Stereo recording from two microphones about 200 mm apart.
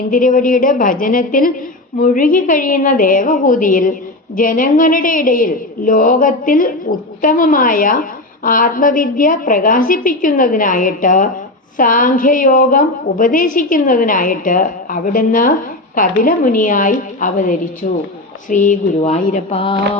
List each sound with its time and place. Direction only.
0.1 s a woman's voice: 40° left (ahead or behind)